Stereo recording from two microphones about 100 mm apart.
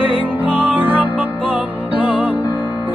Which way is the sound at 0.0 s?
20° right (ahead or behind).